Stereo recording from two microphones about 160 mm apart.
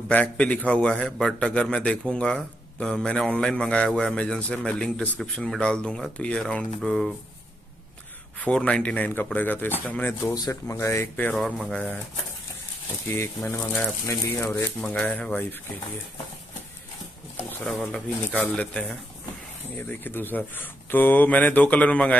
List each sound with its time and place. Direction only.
0.1 s a man's voice: 10° left (ahead or behind)
8.4 s speech: 5° left (ahead or behind)
10.3 s speech: 20° left (ahead or behind)
11.3 s a man's voice: centre (ahead or behind)
13.6 s a man's voice: 5° left (ahead or behind)
14.0 s speech: 15° left (ahead or behind)
17.5 s speech: 10° left (ahead or behind)